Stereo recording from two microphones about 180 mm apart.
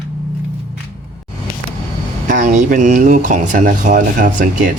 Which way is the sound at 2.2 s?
45° right (ahead or behind).